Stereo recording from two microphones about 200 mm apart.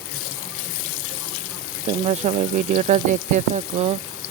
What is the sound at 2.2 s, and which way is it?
Speech, 30° right (ahead or behind).